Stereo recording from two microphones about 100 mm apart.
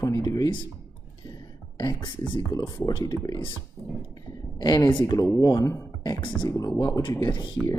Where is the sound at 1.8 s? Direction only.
50° left (ahead or behind).